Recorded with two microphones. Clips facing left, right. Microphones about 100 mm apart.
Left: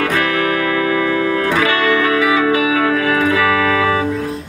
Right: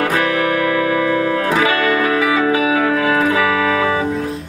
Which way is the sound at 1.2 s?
35° right (ahead or behind).